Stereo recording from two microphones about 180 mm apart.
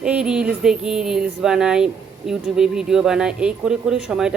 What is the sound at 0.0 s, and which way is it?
Speech, 5° right (ahead or behind).